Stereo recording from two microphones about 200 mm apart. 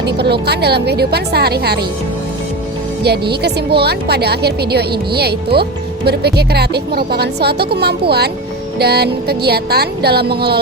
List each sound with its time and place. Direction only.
0.2 s a woman's voice: 55° right (ahead or behind)
3.0 s a woman's voice: 55° right (ahead or behind)